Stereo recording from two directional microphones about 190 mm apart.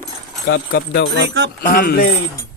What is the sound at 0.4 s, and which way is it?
Speech, 60° left (ahead or behind).